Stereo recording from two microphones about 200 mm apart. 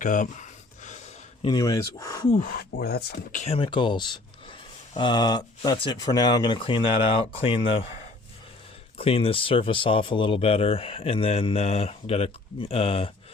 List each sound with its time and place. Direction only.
0.0 s speech: 40° left (ahead or behind)
0.9 s a sound: 35° left (ahead or behind)
1.5 s speech: 15° left (ahead or behind)
2.4 s speech: 50° left (ahead or behind)
3.4 s speech: 30° left (ahead or behind)
9.0 s speech: 30° left (ahead or behind)